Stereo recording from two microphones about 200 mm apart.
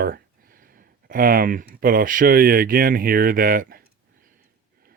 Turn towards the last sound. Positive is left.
turn(degrees=-45)  # may be behind; listen again after turning